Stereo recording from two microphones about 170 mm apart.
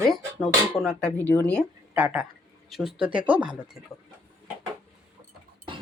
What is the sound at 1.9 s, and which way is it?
Speech, 10° right (ahead or behind).